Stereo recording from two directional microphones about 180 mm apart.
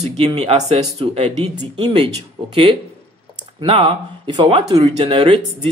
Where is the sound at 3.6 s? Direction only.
30° right (ahead or behind).